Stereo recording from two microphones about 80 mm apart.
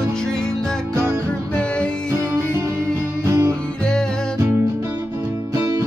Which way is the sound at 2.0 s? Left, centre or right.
Right.